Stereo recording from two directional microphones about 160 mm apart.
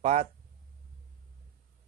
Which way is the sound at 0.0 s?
45° right (ahead or behind).